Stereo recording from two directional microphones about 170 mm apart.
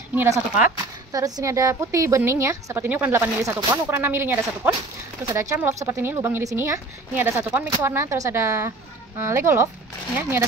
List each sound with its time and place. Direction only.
0.1 s speech: 10° right (ahead or behind)